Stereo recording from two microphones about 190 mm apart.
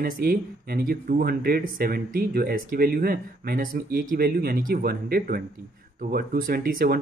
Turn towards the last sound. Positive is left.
turn(degrees=-50)  # may be behind; listen again after turning